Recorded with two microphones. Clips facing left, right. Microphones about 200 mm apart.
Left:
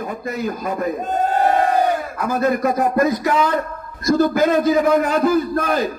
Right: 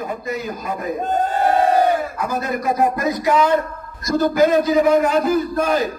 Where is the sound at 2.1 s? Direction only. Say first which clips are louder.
Left 4 dB; 55° left (ahead or behind).